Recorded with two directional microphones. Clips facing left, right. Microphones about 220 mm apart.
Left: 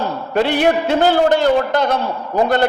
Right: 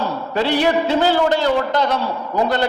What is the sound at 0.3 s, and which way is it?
A man's voice, 50° left (ahead or behind).